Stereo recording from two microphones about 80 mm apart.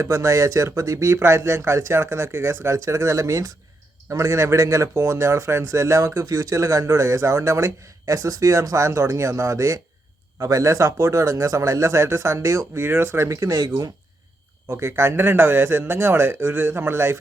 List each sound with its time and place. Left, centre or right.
0.0 s speech: right
14.7 s a man's voice: right